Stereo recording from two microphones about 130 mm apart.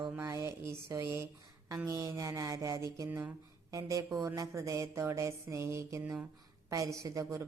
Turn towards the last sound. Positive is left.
turn(degrees=-25)  # may be behind; listen again after turning